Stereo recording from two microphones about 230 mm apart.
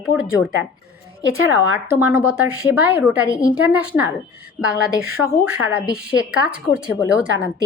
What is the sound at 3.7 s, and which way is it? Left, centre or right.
Speech, centre.